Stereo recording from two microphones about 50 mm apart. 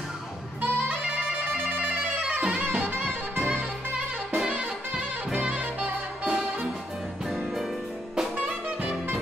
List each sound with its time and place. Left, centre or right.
0.6 s music: right
5.6 s music: right
8.4 s jazz: right